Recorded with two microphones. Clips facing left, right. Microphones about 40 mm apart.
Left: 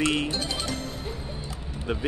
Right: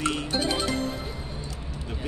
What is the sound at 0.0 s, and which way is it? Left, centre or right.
Music, left.